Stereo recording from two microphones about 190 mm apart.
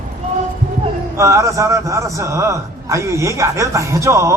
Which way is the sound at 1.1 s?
15° right (ahead or behind).